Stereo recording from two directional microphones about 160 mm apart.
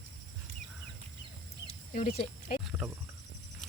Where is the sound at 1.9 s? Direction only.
55° left (ahead or behind).